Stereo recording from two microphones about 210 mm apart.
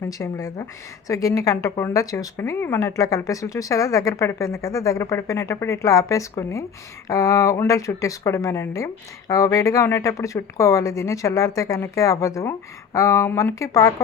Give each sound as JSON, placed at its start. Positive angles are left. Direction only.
{"t": 0.1, "sound": "speech", "side_deg": 15}